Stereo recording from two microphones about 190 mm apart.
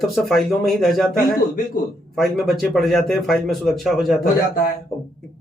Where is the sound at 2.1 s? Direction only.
Centre (ahead or behind).